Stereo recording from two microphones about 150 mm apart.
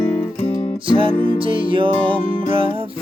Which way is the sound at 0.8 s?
35° right (ahead or behind).